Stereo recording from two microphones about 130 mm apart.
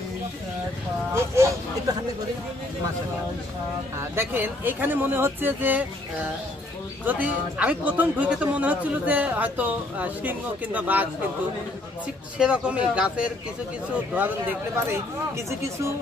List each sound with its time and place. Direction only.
1.1 s vehicle: 20° right (ahead or behind)
4.1 s a man's voice: 15° right (ahead or behind)
12.4 s a man's voice: 10° right (ahead or behind)
14.9 s speech: 20° right (ahead or behind)